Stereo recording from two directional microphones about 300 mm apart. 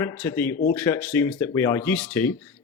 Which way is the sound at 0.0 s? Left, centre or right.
Centre.